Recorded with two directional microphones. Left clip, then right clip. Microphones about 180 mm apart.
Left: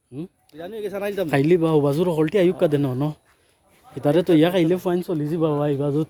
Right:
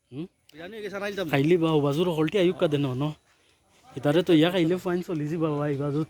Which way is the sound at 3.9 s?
5° left (ahead or behind).